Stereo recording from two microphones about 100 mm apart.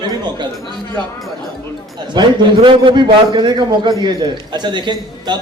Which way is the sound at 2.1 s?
50° right (ahead or behind).